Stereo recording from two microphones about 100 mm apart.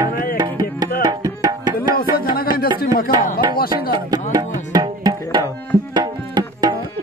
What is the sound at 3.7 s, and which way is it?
Music, 45° right (ahead or behind).